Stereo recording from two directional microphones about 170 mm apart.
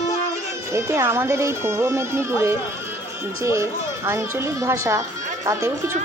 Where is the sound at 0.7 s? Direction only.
15° right (ahead or behind).